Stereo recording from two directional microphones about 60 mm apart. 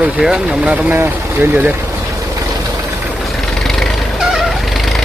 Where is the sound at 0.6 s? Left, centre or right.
Right.